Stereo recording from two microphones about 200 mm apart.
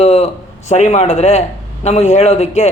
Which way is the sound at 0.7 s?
35° left (ahead or behind).